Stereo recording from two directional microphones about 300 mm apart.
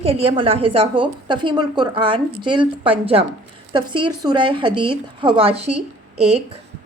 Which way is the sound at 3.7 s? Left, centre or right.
Centre.